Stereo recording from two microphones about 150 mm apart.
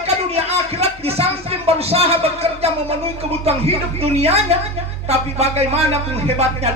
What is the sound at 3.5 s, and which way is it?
Speech, 40° right (ahead or behind).